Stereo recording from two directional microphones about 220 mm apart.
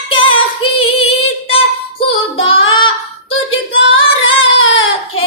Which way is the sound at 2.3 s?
65° left (ahead or behind).